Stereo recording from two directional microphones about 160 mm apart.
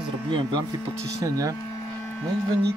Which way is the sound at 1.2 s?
20° right (ahead or behind).